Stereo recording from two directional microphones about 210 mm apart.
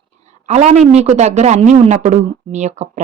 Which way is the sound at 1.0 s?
30° right (ahead or behind).